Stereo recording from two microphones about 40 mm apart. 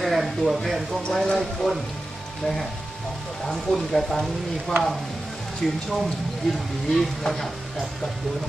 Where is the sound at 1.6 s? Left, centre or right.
Centre.